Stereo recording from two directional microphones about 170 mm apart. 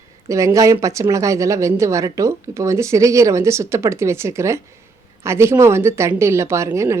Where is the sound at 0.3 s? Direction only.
20° right (ahead or behind).